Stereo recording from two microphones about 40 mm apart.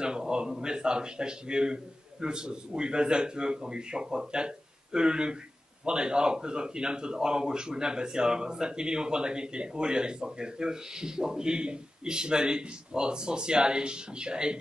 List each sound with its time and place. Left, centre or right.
0.0 s speech: right